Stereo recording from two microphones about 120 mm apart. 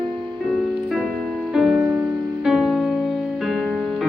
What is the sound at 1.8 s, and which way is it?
Music, 15° right (ahead or behind).